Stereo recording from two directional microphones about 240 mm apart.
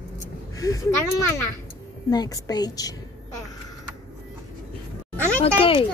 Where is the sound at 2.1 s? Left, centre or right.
Centre.